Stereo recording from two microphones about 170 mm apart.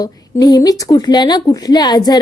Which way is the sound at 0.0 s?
20° left (ahead or behind).